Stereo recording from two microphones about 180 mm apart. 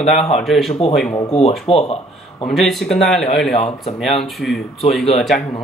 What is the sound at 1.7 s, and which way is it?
Speech, 30° left (ahead or behind).